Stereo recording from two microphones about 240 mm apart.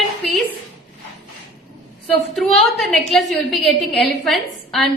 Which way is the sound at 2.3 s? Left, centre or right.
Centre.